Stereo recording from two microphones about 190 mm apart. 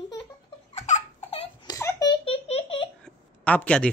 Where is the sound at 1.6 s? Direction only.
20° left (ahead or behind).